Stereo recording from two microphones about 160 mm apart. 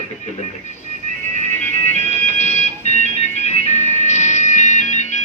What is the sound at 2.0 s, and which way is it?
Music, 45° left (ahead or behind).